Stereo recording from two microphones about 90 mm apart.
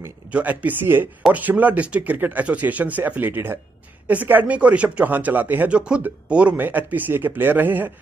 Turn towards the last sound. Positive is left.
turn(degrees=-20)  # may be behind; listen again after turning